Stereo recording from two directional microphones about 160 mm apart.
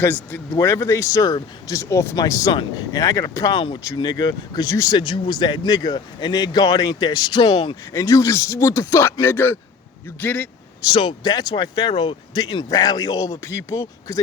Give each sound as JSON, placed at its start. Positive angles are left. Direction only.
{"t": 0.0, "sound": "speech", "side_deg": 10}
{"t": 10.9, "sound": "speech", "side_deg": 25}